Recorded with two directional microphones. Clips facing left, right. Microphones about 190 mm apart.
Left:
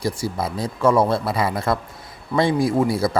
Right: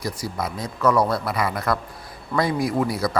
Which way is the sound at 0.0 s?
30° left (ahead or behind).